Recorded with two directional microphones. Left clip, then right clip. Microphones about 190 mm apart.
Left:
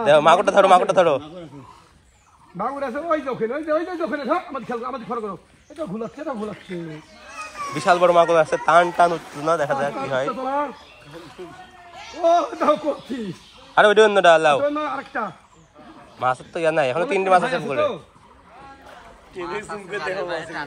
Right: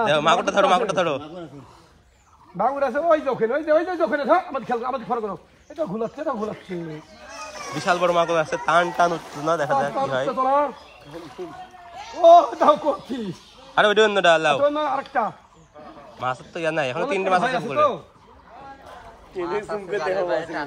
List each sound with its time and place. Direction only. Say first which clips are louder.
0.0 s a man's voice: left 4 dB; 10° right (ahead or behind)
2.5 s a man's voice: right 4 dB; 30° right (ahead or behind)
6.5 s speech: right 1 dB; 50° right (ahead or behind)
7.8 s a man's voice: left 5 dB; 10° right (ahead or behind)
10.4 s a man's voice: right 4 dB; 30° right (ahead or behind)
12.0 s speech: right 6 dB; 55° right (ahead or behind)
12.4 s a man's voice: right 4 dB; 35° right (ahead or behind)
13.7 s a man's voice: left 3 dB; 15° right (ahead or behind)
14.6 s a man's voice: right 2 dB; 35° right (ahead or behind)
16.2 s a man's voice: left 5 dB; 10° right (ahead or behind)
19.3 s a man's voice: right 3 dB; 35° right (ahead or behind)